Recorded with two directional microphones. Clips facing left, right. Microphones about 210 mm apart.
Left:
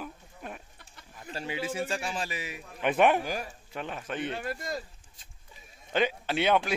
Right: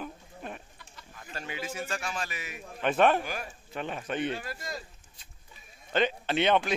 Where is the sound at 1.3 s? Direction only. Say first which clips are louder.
Left 4 dB; 30° left (ahead or behind).